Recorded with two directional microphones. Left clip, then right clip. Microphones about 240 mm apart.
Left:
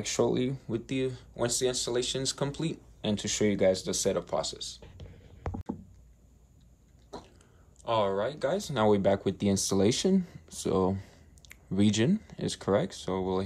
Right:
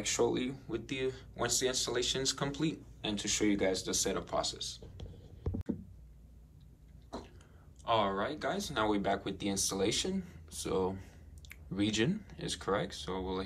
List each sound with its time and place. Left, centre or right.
0.0 s speech: left
3.1 s speech: left
7.8 s speech: centre